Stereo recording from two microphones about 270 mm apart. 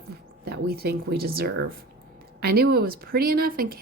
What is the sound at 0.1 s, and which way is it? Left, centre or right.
Speech, right.